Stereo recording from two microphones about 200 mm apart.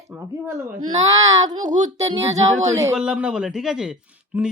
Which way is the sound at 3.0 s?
5° right (ahead or behind).